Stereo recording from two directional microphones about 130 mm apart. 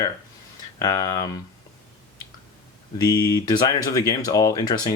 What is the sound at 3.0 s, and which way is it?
Speech, 30° left (ahead or behind).